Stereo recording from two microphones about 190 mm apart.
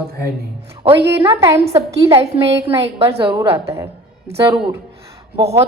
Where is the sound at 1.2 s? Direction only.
25° right (ahead or behind).